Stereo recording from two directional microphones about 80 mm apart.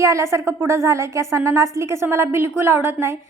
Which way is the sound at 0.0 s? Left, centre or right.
Right.